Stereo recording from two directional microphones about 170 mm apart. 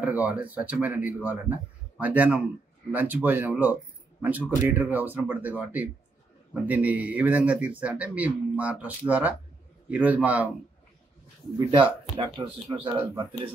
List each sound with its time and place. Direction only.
0.0 s speech: 10° right (ahead or behind)
12.4 s speech: 25° right (ahead or behind)